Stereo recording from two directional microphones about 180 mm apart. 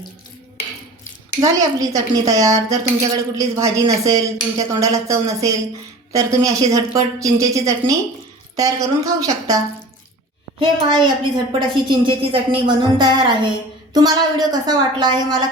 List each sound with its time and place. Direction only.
1.4 s a woman's voice: 20° right (ahead or behind)
10.6 s a woman's voice: 25° right (ahead or behind)